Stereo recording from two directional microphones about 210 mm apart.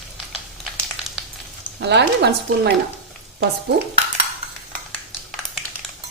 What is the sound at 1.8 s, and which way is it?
Speech, 55° right (ahead or behind).